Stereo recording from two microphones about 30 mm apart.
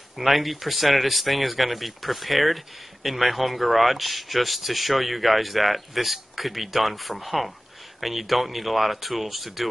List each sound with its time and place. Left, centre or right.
0.2 s speech: centre